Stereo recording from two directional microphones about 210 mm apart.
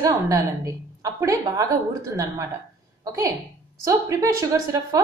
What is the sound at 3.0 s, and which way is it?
A woman's voice, 15° right (ahead or behind).